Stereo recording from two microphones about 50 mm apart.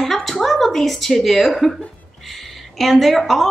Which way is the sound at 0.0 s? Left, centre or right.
Centre.